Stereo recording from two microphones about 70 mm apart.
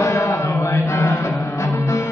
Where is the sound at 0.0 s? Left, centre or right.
Left.